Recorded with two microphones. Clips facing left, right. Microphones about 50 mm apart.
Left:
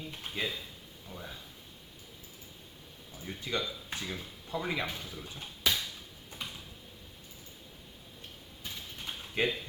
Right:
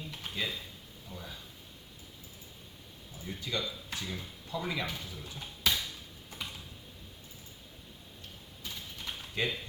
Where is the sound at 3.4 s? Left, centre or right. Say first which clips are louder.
Left 2 dB; left.